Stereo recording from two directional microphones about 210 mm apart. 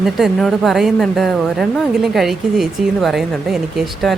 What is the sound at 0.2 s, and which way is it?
Speech, centre (ahead or behind).